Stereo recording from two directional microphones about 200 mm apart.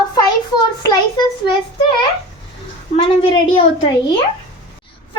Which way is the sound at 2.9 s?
30° left (ahead or behind).